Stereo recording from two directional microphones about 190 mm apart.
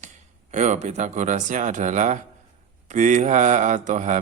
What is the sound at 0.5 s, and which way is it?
Mantra, 40° right (ahead or behind).